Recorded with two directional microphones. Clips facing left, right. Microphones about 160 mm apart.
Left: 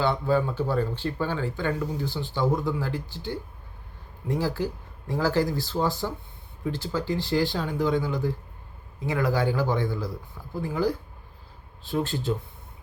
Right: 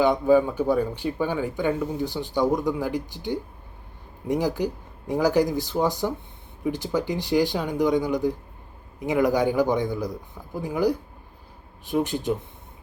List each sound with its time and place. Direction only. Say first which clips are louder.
0.0 s speech: right 5 dB; 15° right (ahead or behind)